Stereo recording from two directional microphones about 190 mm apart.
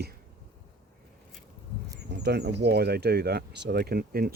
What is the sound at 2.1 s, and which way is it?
Speech, 60° right (ahead or behind).